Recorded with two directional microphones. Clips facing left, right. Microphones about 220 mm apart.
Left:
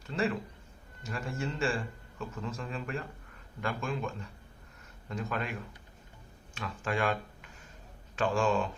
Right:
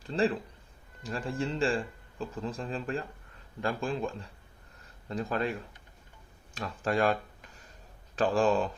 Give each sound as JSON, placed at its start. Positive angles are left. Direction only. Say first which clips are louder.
{"t": 0.0, "sound": "a man's voice", "louder": "right 3 dB", "side_deg": -30}